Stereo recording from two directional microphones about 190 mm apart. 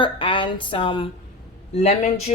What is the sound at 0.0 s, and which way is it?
Speech, 25° left (ahead or behind).